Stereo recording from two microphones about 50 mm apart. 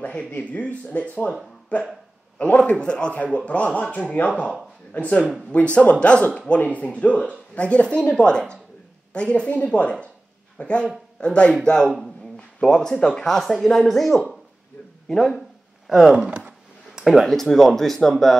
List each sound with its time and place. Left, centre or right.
0.0 s a man's voice: left
4.2 s speech: left
4.9 s a man's voice: left; by 15.4 s centre
15.9 s speech: centre
16.3 s a sound: right
17.0 s speech: centre